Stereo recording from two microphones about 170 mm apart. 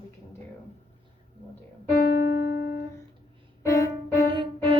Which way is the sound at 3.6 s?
15° left (ahead or behind).